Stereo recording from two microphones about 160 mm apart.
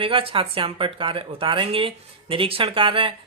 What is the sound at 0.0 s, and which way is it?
Speech, 35° right (ahead or behind).